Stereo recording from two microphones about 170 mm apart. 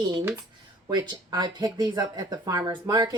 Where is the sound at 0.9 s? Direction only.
25° right (ahead or behind).